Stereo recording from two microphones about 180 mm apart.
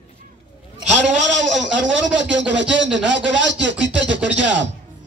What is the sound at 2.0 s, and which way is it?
Speech, 90° right.